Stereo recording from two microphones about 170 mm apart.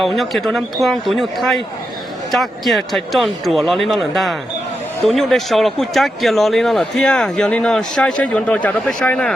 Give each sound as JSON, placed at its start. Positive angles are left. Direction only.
{"t": 0.0, "sound": "speech", "side_deg": 0}